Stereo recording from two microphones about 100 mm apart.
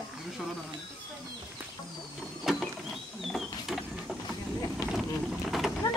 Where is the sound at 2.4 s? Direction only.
Centre (ahead or behind).